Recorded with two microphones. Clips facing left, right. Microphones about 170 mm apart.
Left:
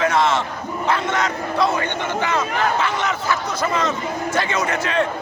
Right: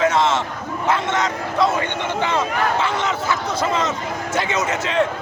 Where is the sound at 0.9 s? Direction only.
20° right (ahead or behind).